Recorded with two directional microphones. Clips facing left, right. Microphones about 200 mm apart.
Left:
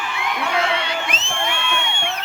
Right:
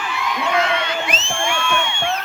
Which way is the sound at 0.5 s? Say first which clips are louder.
Right 2 dB; 30° left (ahead or behind).